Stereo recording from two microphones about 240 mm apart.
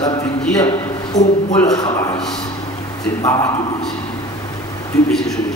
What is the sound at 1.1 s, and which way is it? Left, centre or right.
Speech, left.